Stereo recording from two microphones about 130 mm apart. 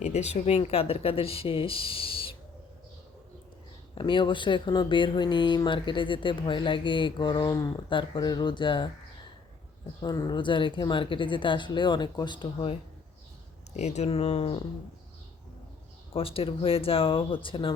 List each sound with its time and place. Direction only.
0.0 s speech: 55° left (ahead or behind)
3.9 s speech: 40° left (ahead or behind)
10.0 s speech: 30° left (ahead or behind)
13.7 s speech: 60° left (ahead or behind)
16.1 s speech: 45° left (ahead or behind)